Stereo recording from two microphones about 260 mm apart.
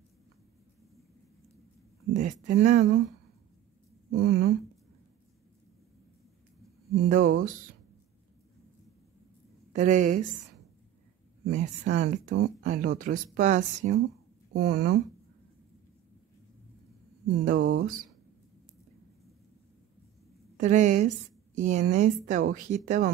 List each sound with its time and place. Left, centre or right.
2.1 s speech: right
4.1 s speech: right
7.0 s speech: right
9.7 s a woman's voice: right
11.4 s speech: right
17.5 s speech: right
20.5 s speech: right